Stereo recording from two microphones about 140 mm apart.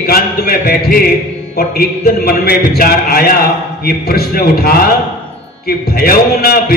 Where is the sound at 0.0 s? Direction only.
90° left.